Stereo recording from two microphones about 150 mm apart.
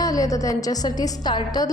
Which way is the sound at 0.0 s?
25° left (ahead or behind).